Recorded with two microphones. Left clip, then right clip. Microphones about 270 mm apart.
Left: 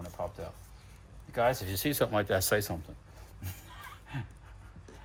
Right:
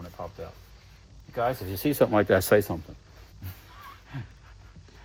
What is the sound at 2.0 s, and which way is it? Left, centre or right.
Speech, right.